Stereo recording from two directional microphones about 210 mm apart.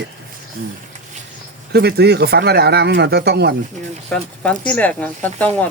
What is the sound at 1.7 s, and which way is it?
Speech, 50° right (ahead or behind).